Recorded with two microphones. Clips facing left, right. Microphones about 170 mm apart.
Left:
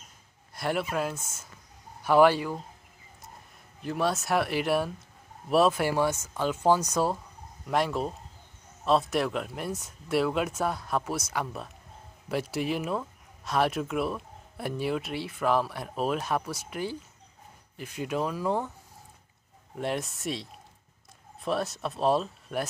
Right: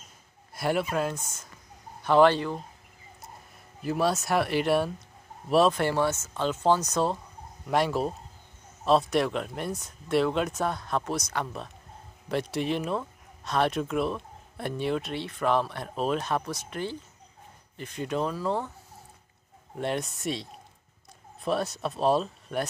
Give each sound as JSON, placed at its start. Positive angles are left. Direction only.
{"t": 0.6, "sound": "speech", "side_deg": 0}
{"t": 3.8, "sound": "speech", "side_deg": 0}
{"t": 19.8, "sound": "speech", "side_deg": 5}